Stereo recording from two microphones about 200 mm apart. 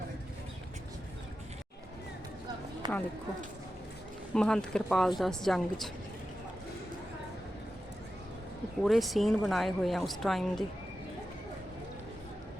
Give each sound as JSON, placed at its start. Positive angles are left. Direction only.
{"t": 2.8, "sound": "speech", "side_deg": -20}
{"t": 4.4, "sound": "speech", "side_deg": 5}
{"t": 8.8, "sound": "speech", "side_deg": 0}